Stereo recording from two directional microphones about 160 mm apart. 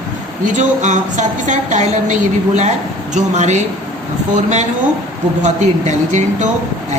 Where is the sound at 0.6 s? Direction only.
50° right (ahead or behind).